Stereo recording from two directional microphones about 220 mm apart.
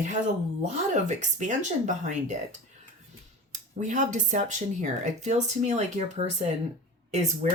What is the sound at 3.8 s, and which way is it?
Speech, 35° right (ahead or behind).